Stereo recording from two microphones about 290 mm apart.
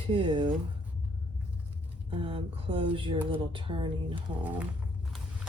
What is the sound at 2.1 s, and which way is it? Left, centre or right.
Speech, centre.